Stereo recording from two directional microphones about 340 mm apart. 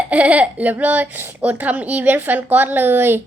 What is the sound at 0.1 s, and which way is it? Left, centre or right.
Speech, centre.